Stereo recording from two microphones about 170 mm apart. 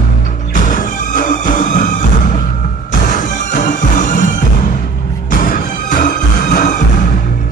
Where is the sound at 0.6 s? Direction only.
50° left (ahead or behind).